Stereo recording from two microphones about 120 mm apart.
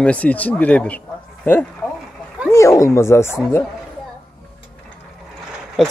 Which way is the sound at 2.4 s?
25° left (ahead or behind).